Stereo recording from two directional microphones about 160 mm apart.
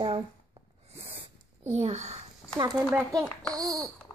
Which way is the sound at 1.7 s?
45° right (ahead or behind).